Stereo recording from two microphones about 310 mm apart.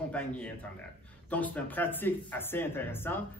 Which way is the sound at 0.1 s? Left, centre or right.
Centre.